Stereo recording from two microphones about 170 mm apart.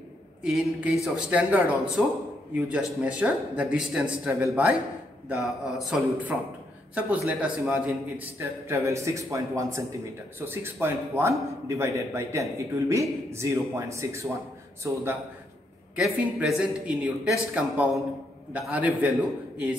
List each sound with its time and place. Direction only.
0.4 s a man's voice: 5° right (ahead or behind)
16.0 s a man's voice: 5° right (ahead or behind)